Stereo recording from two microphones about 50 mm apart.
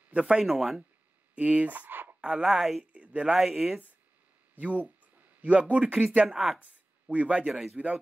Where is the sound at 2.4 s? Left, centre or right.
Centre.